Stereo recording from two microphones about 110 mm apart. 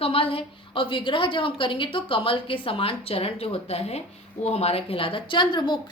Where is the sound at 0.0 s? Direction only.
60° left (ahead or behind).